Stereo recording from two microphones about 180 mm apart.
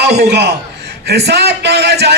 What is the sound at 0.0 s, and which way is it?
Speech, 65° right (ahead or behind).